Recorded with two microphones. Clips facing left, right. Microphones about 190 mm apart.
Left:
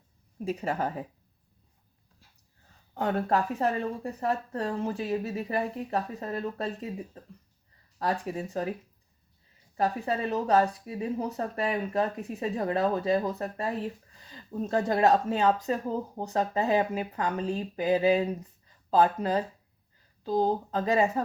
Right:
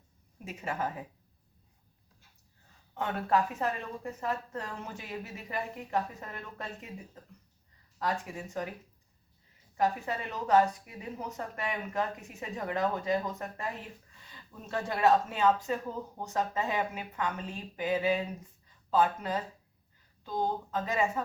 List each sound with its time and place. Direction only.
0.3 s speech: 35° left (ahead or behind)
2.9 s speech: 35° left (ahead or behind)
9.7 s speech: 35° left (ahead or behind)